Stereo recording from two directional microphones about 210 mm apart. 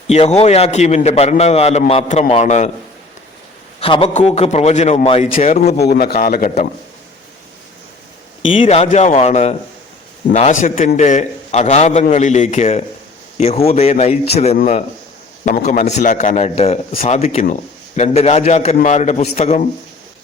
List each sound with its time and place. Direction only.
0.1 s a man's voice: 30° left (ahead or behind)
3.8 s a man's voice: 25° left (ahead or behind)
5.8 s a man's voice: 50° left (ahead or behind)
8.4 s a man's voice: 25° left (ahead or behind)